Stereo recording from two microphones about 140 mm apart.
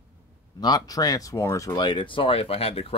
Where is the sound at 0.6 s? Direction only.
25° left (ahead or behind).